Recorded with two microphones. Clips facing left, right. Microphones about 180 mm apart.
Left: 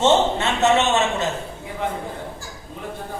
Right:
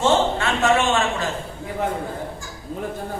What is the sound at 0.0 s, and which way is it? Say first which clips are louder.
A man's voice: left 1 dB; 20° left (ahead or behind).